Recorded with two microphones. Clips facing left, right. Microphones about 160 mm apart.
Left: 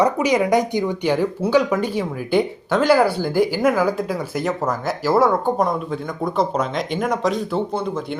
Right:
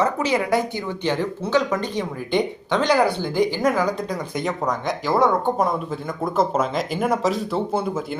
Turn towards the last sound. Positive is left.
turn(degrees=0)  # may be behind; listen again after turning